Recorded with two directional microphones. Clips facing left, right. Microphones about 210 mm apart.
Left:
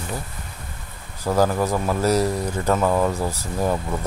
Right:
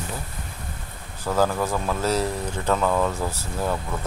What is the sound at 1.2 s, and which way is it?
Speech, 10° left (ahead or behind).